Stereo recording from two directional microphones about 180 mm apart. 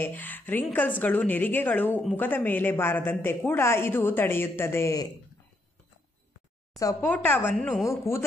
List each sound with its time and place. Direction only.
0.0 s a woman's voice: 10° left (ahead or behind)
6.8 s a woman's voice: 20° left (ahead or behind); by 7.9 s centre (ahead or behind)
7.9 s a woman's voice: 15° left (ahead or behind)